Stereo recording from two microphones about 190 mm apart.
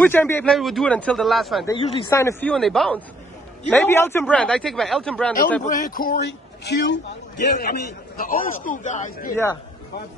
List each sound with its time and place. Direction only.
0.0 s speech: 10° left (ahead or behind)
2.0 s speech: 15° left (ahead or behind)
2.5 s speech: centre (ahead or behind)
5.6 s a man's voice: 45° left (ahead or behind)